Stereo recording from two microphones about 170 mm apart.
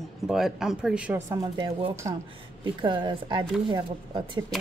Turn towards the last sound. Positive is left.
turn(degrees=-25)  # may be behind; listen again after turning